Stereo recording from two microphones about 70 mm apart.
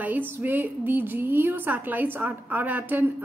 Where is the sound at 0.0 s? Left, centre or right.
Right.